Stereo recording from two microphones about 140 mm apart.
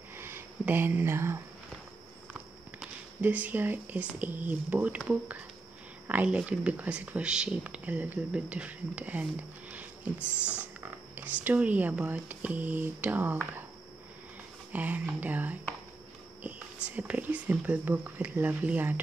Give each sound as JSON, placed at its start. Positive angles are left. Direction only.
{"t": 0.1, "sound": "a sound", "side_deg": -15}
{"t": 2.8, "sound": "speech", "side_deg": -10}
{"t": 14.7, "sound": "speech", "side_deg": -10}